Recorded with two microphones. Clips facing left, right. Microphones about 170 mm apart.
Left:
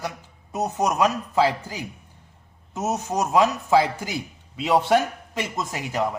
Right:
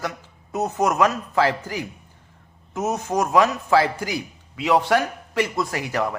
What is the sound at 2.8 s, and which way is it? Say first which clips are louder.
Speech: right 2 dB; 20° left (ahead or behind).